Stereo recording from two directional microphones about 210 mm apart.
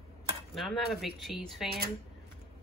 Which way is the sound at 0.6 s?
Centre (ahead or behind).